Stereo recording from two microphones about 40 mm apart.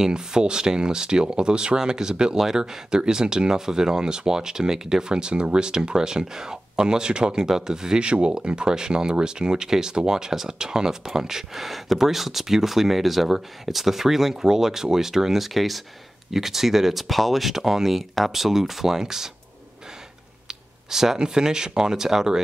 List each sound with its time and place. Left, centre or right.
0.0 s speech: centre
8.0 s speech: right; by 19.3 s centre
20.4 s speech: centre